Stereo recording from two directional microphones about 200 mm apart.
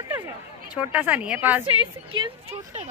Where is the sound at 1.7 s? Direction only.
25° right (ahead or behind).